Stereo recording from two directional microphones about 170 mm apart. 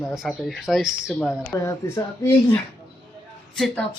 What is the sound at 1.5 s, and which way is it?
Speech, 15° left (ahead or behind).